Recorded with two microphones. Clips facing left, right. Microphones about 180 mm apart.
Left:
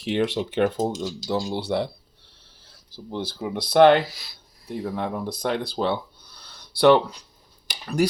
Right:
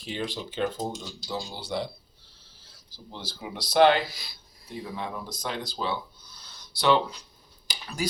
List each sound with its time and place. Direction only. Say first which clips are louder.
0.0 s speech: left 9 dB; 70° left (ahead or behind)
4.1 s speech: right 1 dB; centre (ahead or behind)
4.6 s speech: left 7 dB; 60° left (ahead or behind)
7.7 s a sound: left 11 dB; 65° left (ahead or behind)